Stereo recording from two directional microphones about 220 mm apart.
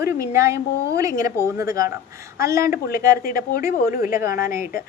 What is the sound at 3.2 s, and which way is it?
A woman's voice, 40° left (ahead or behind).